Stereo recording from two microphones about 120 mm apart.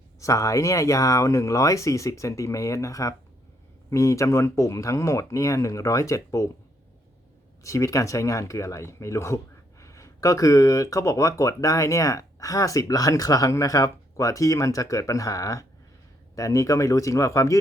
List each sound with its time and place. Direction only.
0.2 s speech: 25° left (ahead or behind)
7.6 s speech: 25° left (ahead or behind)